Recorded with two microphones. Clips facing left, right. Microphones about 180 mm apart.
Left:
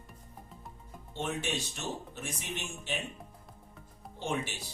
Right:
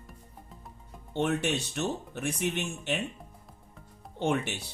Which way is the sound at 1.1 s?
65° right (ahead or behind).